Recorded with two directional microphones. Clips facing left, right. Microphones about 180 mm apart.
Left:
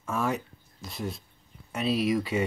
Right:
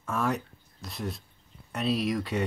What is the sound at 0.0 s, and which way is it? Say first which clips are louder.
Speech: even; centre (ahead or behind).